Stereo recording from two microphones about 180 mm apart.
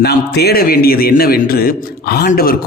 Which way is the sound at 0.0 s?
65° left (ahead or behind).